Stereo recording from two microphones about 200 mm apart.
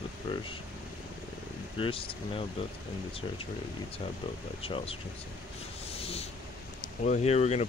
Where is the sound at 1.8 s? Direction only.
25° left (ahead or behind).